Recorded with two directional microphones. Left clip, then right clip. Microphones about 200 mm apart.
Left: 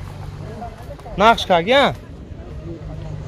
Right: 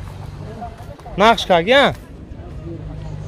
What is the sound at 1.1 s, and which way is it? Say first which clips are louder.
Speech: right 1 dB; 25° right (ahead or behind).